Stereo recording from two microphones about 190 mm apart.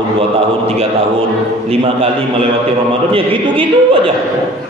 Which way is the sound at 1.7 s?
30° right (ahead or behind).